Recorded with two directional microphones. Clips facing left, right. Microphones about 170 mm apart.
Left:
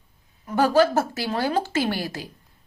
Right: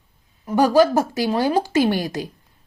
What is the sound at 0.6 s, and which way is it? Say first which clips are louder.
A woman's voice: right 3 dB; 15° right (ahead or behind).